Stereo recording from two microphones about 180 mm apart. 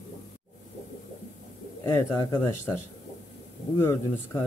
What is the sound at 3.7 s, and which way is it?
Speech, 15° left (ahead or behind).